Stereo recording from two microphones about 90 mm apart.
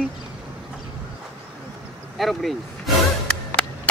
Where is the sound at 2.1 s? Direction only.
Centre (ahead or behind).